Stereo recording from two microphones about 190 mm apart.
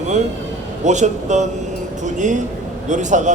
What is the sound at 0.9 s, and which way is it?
Speech, 40° right (ahead or behind).